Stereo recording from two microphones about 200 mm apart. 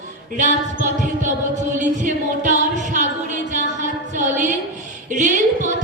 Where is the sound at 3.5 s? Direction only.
40° right (ahead or behind).